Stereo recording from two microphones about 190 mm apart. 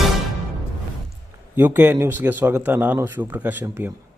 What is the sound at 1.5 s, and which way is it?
Speech, 10° right (ahead or behind).